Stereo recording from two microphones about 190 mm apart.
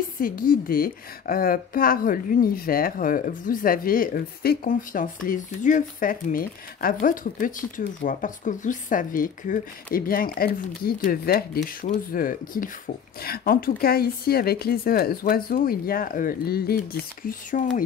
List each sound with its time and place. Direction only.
0.2 s a woman's voice: 50° left (ahead or behind)